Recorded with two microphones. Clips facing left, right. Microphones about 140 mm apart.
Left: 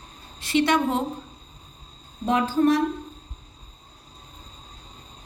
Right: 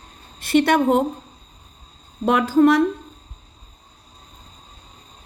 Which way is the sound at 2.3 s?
80° right.